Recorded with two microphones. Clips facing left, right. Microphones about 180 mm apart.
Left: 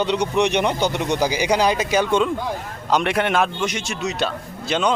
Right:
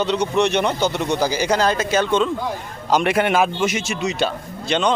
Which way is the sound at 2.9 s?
Centre (ahead or behind).